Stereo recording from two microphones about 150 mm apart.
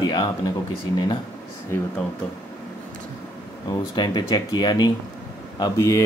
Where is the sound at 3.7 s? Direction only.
30° left (ahead or behind).